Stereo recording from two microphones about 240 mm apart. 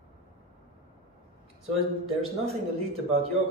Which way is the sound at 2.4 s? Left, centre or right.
Right.